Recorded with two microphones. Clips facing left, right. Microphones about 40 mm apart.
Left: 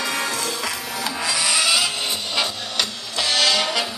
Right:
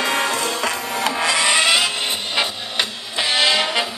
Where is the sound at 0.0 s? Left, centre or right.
Right.